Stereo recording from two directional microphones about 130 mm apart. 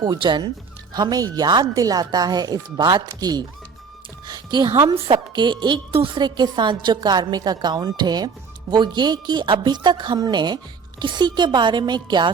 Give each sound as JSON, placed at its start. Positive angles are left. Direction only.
{"t": 0.0, "sound": "a woman's voice", "side_deg": -35}